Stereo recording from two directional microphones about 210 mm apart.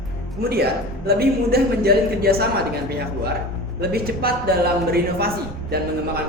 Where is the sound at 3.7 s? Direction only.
45° right (ahead or behind).